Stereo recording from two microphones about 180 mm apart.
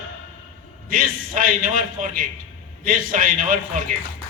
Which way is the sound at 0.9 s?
50° right (ahead or behind).